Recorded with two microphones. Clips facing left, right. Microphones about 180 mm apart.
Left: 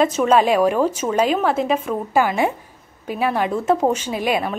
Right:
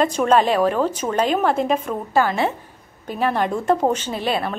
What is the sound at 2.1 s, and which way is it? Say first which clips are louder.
A woman's voice: left 1 dB; 15° left (ahead or behind).